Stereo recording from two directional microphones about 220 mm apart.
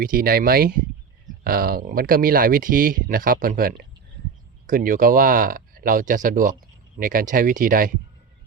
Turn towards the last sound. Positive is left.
turn(degrees=-40)  # may be behind; listen again after turning